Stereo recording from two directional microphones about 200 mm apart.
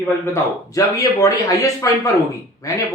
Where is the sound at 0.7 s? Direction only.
15° left (ahead or behind).